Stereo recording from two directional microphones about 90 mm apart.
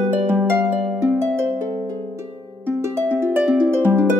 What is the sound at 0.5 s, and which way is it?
Harp, 20° right (ahead or behind).